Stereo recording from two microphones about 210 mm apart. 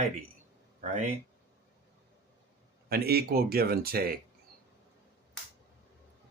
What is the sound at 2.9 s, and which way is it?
Speech, 45° right (ahead or behind).